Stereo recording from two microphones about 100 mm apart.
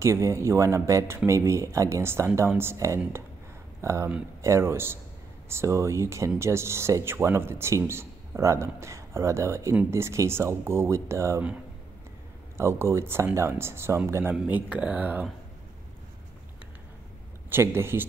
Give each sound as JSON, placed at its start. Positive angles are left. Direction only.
{"t": 0.0, "sound": "speech", "side_deg": -30}
{"t": 12.5, "sound": "speech", "side_deg": -25}
{"t": 14.3, "sound": "speech", "side_deg": -15}
{"t": 17.5, "sound": "speech", "side_deg": -25}